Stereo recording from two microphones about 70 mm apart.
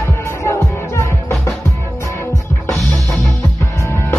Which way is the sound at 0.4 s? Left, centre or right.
Left.